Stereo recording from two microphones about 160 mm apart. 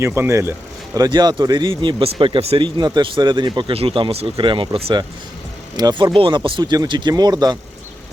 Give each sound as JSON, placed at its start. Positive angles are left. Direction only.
{"t": 0.0, "sound": "speech", "side_deg": -15}